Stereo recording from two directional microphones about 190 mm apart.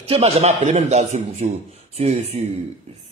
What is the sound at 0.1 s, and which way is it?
Speech, 35° right (ahead or behind).